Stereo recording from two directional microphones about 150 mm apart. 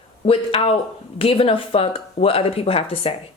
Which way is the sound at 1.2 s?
40° left (ahead or behind).